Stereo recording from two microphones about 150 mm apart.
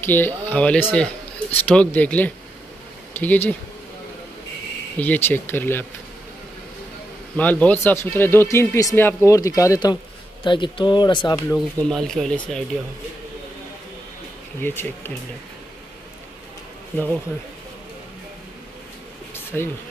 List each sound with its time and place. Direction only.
0.0 s speech: 15° left (ahead or behind)
4.9 s speech: 10° left (ahead or behind)
7.3 s speech: 10° left (ahead or behind); by 11.6 s 30° left (ahead or behind)
11.9 s speech: centre (ahead or behind)
14.6 s speech: 15° left (ahead or behind)
19.3 s a sound: 15° left (ahead or behind)